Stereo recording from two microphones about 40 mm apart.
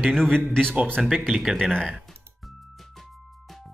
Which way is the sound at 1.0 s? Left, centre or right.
Centre.